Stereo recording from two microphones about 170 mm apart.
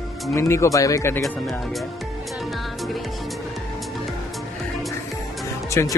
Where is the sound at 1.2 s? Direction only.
Centre (ahead or behind).